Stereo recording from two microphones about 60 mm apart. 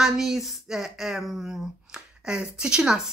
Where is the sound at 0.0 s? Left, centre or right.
Centre.